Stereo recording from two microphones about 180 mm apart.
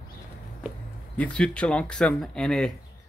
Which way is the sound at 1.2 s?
5° left (ahead or behind).